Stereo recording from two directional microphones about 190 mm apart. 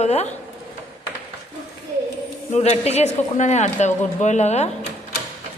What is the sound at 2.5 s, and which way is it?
A woman's voice, 35° left (ahead or behind).